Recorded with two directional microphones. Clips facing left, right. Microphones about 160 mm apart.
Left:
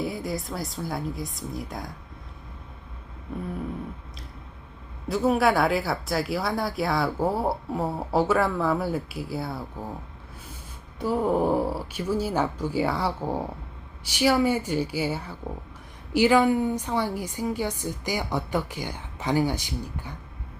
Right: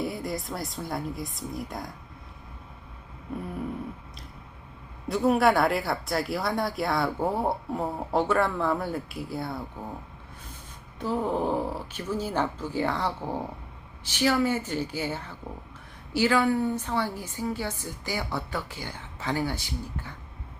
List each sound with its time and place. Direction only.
0.0 s speech: centre (ahead or behind)
5.0 s speech: centre (ahead or behind)
11.0 s a woman's voice: 10° left (ahead or behind)